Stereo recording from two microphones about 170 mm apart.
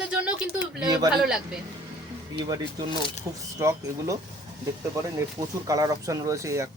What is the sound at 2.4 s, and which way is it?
Speech, 25° right (ahead or behind).